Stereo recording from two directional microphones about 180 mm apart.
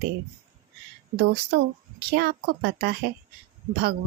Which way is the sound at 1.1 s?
60° right (ahead or behind).